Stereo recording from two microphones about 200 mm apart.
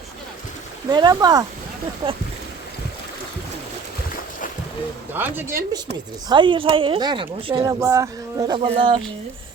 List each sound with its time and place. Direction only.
0.9 s speech: 20° right (ahead or behind)
5.1 s speech: 10° right (ahead or behind)
6.2 s speech: 25° right (ahead or behind)